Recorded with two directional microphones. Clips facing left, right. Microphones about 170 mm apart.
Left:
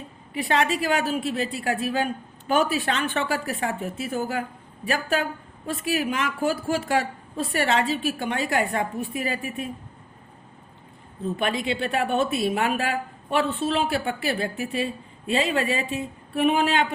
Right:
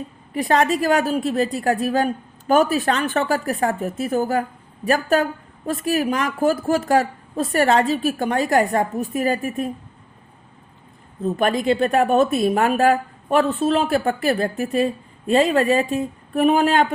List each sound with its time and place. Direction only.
0.3 s speech: 40° right (ahead or behind)
11.3 s speech: 45° right (ahead or behind)